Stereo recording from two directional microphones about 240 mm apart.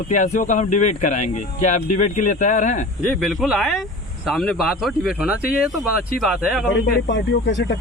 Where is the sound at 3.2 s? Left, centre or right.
Centre.